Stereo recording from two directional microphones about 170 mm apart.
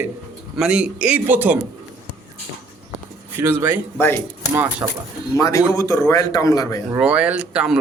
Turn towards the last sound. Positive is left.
turn(degrees=-5)  # may be behind; listen again after turning